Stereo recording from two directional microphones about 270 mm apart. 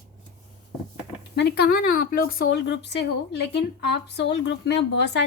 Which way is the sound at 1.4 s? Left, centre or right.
Left.